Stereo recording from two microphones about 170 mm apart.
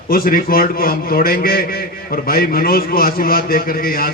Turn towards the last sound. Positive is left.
turn(degrees=60)  # may be behind; listen again after turning